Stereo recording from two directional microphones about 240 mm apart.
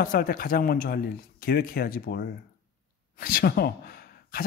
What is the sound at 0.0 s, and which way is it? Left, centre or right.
Speech, left.